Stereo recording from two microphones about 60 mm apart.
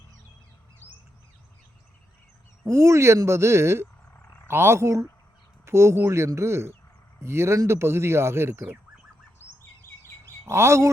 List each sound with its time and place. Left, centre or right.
2.6 s speech: right
10.2 s speech: right